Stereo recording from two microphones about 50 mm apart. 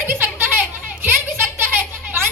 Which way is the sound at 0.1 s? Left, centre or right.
Right.